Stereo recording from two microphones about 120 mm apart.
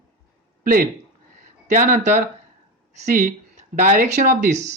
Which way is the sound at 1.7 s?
90° right.